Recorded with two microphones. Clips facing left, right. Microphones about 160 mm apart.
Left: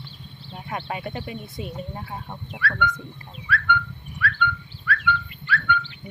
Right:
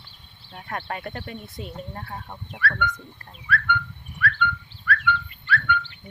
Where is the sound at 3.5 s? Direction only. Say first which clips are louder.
Left 1 dB; 50° right (ahead or behind).